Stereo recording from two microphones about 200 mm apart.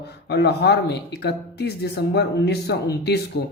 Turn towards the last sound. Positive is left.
turn(degrees=55)  # may be behind; listen again after turning